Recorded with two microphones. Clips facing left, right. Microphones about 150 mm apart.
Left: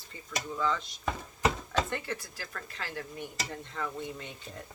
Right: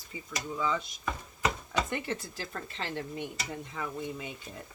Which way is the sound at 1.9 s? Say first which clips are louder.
Right 2 dB; 20° right (ahead or behind).